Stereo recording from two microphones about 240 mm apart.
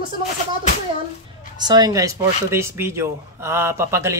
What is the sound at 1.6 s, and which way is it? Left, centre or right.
Speech, centre.